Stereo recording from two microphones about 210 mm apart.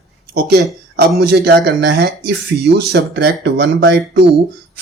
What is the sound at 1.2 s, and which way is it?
Speech, 50° right (ahead or behind).